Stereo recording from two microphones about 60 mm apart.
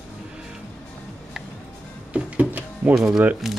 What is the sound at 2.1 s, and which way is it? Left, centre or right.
Music, right.